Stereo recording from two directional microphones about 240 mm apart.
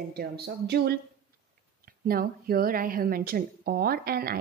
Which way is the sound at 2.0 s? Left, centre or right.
Right.